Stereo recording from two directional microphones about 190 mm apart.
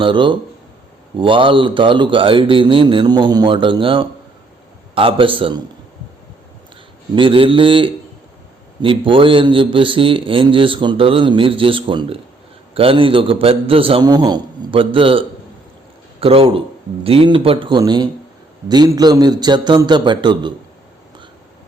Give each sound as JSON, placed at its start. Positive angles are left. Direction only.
{"t": 0.0, "sound": "a man's voice", "side_deg": -25}
{"t": 7.2, "sound": "a man's voice", "side_deg": -25}
{"t": 16.2, "sound": "a man's voice", "side_deg": -30}